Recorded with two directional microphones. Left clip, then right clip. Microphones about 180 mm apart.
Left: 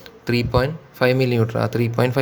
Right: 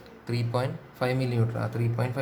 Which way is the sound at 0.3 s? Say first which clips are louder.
Left 10 dB; 40° left (ahead or behind).